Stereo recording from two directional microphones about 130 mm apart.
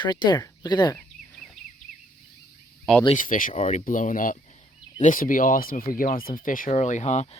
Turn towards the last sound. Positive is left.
turn(degrees=60)  # may be behind; listen again after turning